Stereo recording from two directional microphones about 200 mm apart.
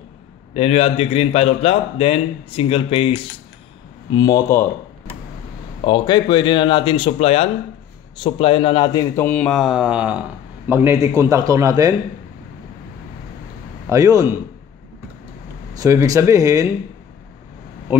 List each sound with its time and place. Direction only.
0.6 s a man's voice: 30° left (ahead or behind)
4.1 s speech: 20° left (ahead or behind)
5.9 s a man's voice: 20° left (ahead or behind); by 11.9 s 15° right (ahead or behind)
13.8 s speech: 15° right (ahead or behind)
15.8 s speech: 15° right (ahead or behind)